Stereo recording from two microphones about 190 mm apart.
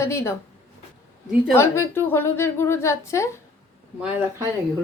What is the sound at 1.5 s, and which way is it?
A woman's voice, 15° left (ahead or behind).